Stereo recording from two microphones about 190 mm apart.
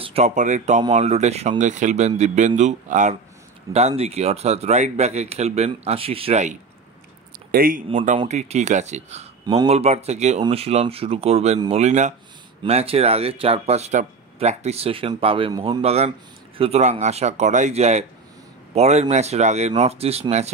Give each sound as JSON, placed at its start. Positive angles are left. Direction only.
{"t": 0.0, "sound": "speech", "side_deg": -35}
{"t": 7.5, "sound": "speech", "side_deg": -50}
{"t": 8.2, "sound": "speech", "side_deg": -35}